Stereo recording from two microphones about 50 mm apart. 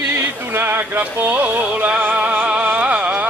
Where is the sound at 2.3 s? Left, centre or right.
Right.